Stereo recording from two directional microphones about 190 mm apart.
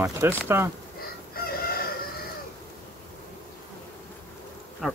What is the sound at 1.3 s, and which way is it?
Chicken, 50° left (ahead or behind).